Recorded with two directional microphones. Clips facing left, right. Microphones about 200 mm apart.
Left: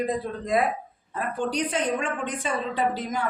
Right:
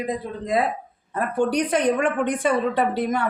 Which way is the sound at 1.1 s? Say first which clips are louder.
Right 6 dB; 60° right (ahead or behind).